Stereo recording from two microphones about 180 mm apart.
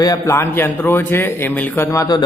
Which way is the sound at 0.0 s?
15° left (ahead or behind).